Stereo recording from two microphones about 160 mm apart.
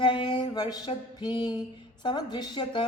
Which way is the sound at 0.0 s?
30° left (ahead or behind).